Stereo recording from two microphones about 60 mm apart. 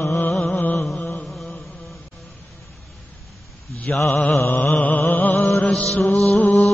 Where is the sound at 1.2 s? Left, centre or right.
Centre.